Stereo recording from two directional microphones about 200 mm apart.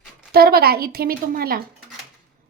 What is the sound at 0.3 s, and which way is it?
Speech, 50° right (ahead or behind).